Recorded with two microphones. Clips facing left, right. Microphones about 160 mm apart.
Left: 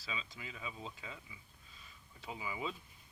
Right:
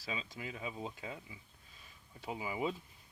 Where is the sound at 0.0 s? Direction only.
45° right (ahead or behind).